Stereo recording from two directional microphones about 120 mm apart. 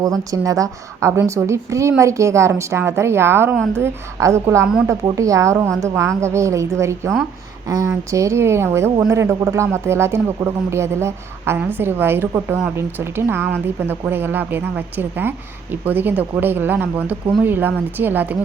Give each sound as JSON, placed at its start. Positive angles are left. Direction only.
{"t": 0.0, "sound": "a woman's voice", "side_deg": -30}